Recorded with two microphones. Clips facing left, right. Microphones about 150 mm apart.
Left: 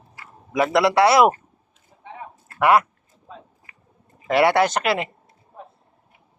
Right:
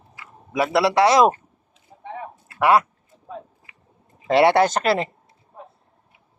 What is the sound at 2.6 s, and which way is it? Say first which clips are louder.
Speech: even; 15° right (ahead or behind).